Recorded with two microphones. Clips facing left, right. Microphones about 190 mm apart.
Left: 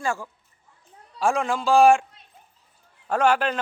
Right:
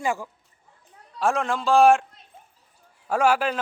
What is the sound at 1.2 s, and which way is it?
Speech, centre (ahead or behind).